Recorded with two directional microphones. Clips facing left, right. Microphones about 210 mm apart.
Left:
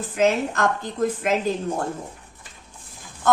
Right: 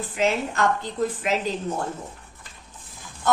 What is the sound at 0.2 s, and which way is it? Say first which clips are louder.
A woman's voice: left 3 dB; 45° left (ahead or behind).